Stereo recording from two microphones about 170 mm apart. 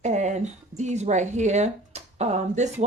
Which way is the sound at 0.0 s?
45° right (ahead or behind).